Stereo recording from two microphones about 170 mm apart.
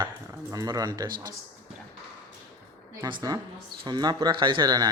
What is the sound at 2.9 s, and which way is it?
A woman's voice, 20° right (ahead or behind).